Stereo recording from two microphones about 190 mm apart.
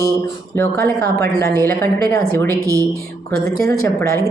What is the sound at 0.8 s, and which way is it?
Speech, 55° right (ahead or behind).